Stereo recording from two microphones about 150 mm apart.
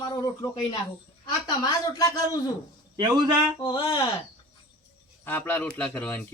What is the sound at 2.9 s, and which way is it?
Speech, 25° right (ahead or behind).